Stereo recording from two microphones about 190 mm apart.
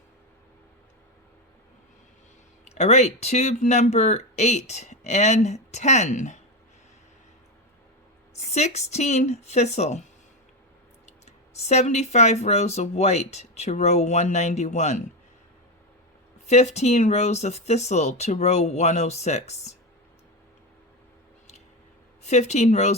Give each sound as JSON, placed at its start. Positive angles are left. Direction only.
{"t": 2.6, "sound": "speech", "side_deg": 35}
{"t": 8.4, "sound": "speech", "side_deg": 35}
{"t": 11.0, "sound": "speech", "side_deg": 35}
{"t": 16.5, "sound": "speech", "side_deg": 35}
{"t": 22.2, "sound": "speech", "side_deg": 35}